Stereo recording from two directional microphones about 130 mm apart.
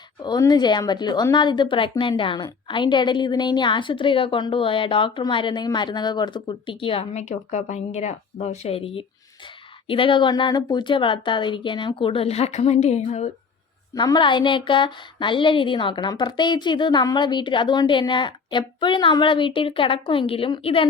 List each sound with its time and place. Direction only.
0.2 s a woman's voice: 30° left (ahead or behind); by 13.3 s 60° left (ahead or behind)
13.9 s a woman's voice: 30° left (ahead or behind)